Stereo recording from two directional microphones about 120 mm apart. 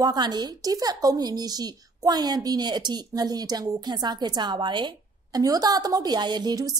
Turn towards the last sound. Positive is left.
turn(degrees=-30)  # may be behind; listen again after turning